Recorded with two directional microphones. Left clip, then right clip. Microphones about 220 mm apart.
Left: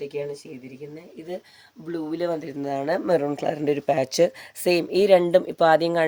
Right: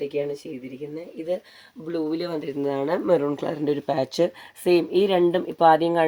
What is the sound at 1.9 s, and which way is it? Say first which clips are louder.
Speech: even; 25° left (ahead or behind).